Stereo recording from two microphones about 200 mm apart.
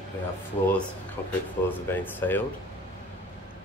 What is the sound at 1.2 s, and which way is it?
Speech, 10° left (ahead or behind).